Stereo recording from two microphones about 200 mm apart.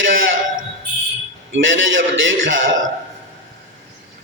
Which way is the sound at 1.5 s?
70° right (ahead or behind).